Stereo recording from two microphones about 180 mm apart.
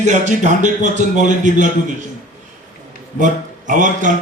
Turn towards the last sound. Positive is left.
turn(degrees=-45)  # may be behind; listen again after turning